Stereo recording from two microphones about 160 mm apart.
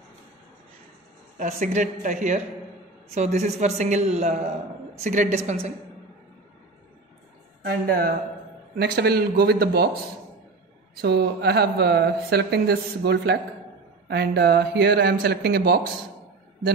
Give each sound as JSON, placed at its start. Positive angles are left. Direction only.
{"t": 1.4, "sound": "a man's voice", "side_deg": -50}
{"t": 7.6, "sound": "a man's voice", "side_deg": -70}
{"t": 11.0, "sound": "speech", "side_deg": -90}